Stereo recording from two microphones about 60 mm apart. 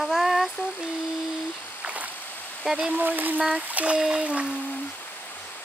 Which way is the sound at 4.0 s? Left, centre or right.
Centre.